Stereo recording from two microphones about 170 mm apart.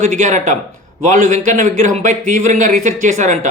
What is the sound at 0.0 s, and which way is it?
A man's voice, 45° right (ahead or behind).